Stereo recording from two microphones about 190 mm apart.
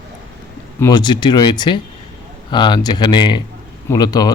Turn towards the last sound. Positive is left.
turn(degrees=20)  # may be behind; listen again after turning